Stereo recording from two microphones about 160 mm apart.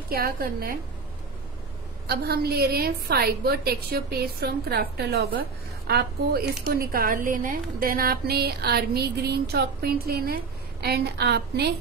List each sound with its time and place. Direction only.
0.1 s a woman's voice: 70° right (ahead or behind)
2.0 s a woman's voice: 80° right
6.7 s a woman's voice: 65° right (ahead or behind); by 11.7 s 90° right